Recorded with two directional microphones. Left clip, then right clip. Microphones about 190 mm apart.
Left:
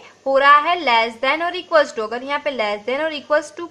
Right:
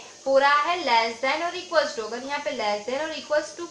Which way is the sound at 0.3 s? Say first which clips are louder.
Left 7 dB; 40° left (ahead or behind).